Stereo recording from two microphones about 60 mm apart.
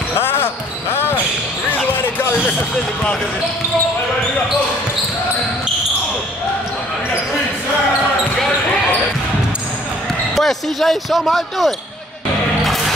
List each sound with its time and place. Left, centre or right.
0.2 s basketball bounce: left
2.0 s music: left
2.7 s speech: centre
10.3 s speech: centre
12.6 s music: centre